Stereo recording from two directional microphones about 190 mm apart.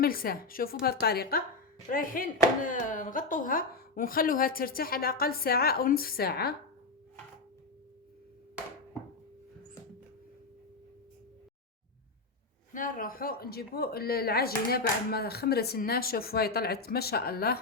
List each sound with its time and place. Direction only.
0.0 s speech: 50° left (ahead or behind)
12.7 s speech: 45° left (ahead or behind)